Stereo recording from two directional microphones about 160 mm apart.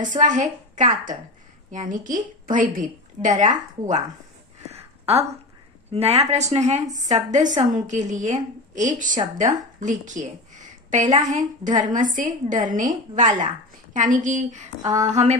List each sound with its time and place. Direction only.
0.0 s a woman's voice: 50° right (ahead or behind)
4.7 s a sound: 40° right (ahead or behind)
5.9 s a woman's voice: 40° right (ahead or behind)